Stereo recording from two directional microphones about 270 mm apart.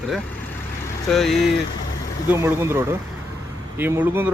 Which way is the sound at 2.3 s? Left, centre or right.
Centre.